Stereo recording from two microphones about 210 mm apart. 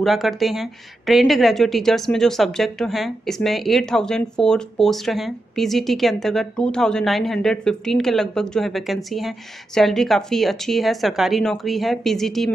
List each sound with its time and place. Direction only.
0.0 s a woman's voice: centre (ahead or behind)